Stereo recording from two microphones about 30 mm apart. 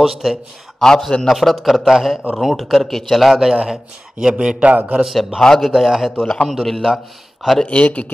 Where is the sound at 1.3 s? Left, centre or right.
Centre.